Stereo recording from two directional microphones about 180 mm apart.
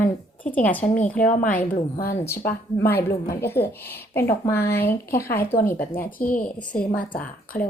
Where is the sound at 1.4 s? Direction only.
50° left (ahead or behind).